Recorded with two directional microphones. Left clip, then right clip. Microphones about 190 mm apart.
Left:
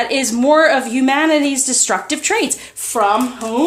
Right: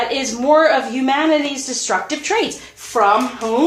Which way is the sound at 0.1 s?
50° left (ahead or behind).